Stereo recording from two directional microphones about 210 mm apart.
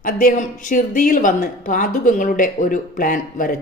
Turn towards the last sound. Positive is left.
turn(degrees=40)  # may be behind; listen again after turning